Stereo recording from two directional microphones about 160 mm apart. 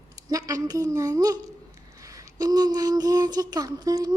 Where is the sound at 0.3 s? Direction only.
20° right (ahead or behind).